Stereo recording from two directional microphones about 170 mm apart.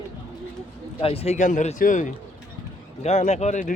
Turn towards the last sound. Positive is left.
turn(degrees=45)  # may be behind; listen again after turning